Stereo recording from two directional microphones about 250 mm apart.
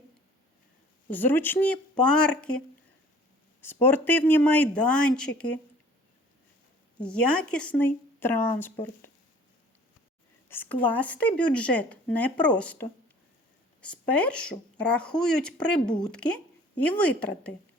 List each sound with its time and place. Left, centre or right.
1.1 s speech: centre
3.6 s speech: centre
7.0 s speech: centre
10.5 s speech: centre